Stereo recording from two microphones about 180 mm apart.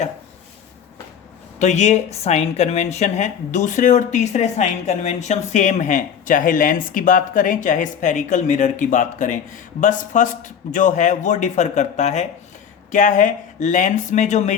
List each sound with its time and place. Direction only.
1.5 s speech: 40° left (ahead or behind)